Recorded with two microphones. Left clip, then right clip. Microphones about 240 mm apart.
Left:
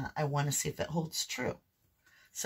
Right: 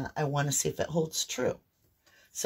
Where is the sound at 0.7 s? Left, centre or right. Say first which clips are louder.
Right 6 dB; left.